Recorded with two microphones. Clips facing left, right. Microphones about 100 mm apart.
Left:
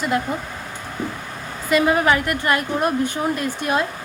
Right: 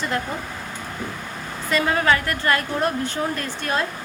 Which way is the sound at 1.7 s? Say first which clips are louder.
Left 3 dB; 15° left (ahead or behind).